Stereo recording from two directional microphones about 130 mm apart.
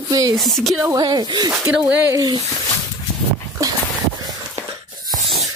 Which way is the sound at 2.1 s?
30° right (ahead or behind).